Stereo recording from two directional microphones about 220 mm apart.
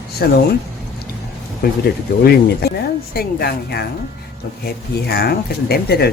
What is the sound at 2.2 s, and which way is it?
Speech, 45° left (ahead or behind).